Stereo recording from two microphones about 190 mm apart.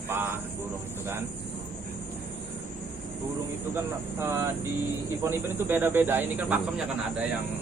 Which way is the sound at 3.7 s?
15° right (ahead or behind).